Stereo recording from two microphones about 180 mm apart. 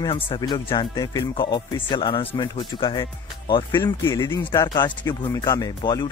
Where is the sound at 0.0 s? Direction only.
25° left (ahead or behind).